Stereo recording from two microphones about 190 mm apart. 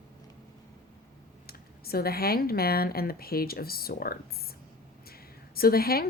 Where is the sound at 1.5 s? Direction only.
55° left (ahead or behind).